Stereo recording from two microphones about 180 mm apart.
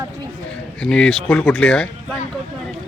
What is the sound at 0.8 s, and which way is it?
Speech, 5° left (ahead or behind).